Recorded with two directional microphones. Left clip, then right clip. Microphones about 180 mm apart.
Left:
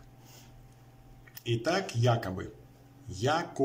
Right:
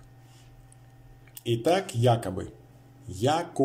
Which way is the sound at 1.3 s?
20° right (ahead or behind).